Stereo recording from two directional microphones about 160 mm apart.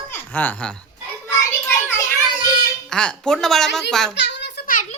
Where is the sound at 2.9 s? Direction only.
5° left (ahead or behind).